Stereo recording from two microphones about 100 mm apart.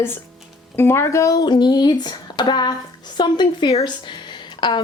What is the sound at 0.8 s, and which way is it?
Speech, 25° left (ahead or behind).